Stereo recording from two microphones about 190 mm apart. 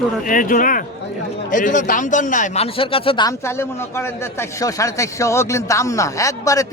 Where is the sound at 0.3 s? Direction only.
45° left (ahead or behind); by 3.3 s 25° left (ahead or behind).